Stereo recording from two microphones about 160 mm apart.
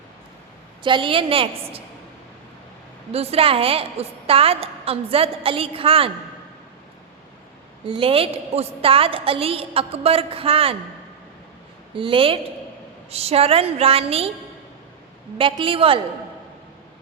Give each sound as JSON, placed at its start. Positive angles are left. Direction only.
{"t": 0.8, "sound": "a woman's voice", "side_deg": -30}
{"t": 3.1, "sound": "a woman's voice", "side_deg": -40}
{"t": 7.9, "sound": "a woman's voice", "side_deg": -35}
{"t": 11.9, "sound": "a woman's voice", "side_deg": -35}
{"t": 15.4, "sound": "a woman's voice", "side_deg": -35}